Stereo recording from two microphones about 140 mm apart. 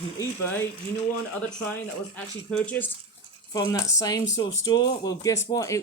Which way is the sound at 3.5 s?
25° left (ahead or behind).